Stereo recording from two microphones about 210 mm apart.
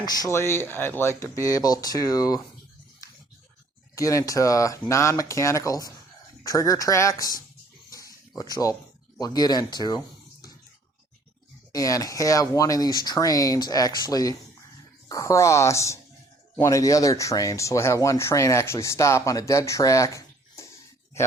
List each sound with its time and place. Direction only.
0.0 s speech: 20° left (ahead or behind)
3.9 s speech: 15° left (ahead or behind)
7.9 s a sound: 15° left (ahead or behind)
9.1 s speech: 20° left (ahead or behind)
11.7 s speech: 15° left (ahead or behind)